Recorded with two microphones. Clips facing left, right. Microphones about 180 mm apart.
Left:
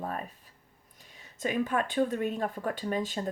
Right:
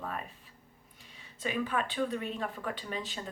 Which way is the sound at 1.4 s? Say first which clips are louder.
Left 4 dB; 45° left (ahead or behind).